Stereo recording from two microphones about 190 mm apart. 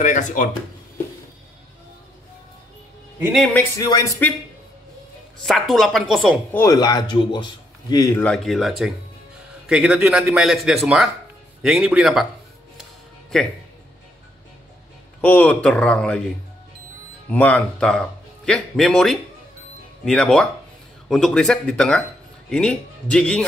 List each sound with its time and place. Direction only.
0.0 s speech: 40° left (ahead or behind)
3.7 s speech: 15° left (ahead or behind)
5.4 s speech: centre (ahead or behind)
6.5 s speech: 15° left (ahead or behind)
8.2 s speech: 5° left (ahead or behind)
15.2 s speech: 10° left (ahead or behind)
17.3 s speech: 10° left (ahead or behind)